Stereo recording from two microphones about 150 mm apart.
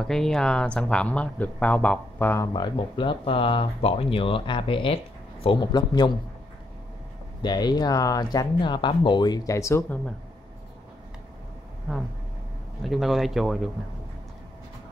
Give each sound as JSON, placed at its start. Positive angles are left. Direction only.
{"t": 0.0, "sound": "speech", "side_deg": 5}
{"t": 2.4, "sound": "speech", "side_deg": 30}
{"t": 7.4, "sound": "speech", "side_deg": 30}
{"t": 11.9, "sound": "speech", "side_deg": 0}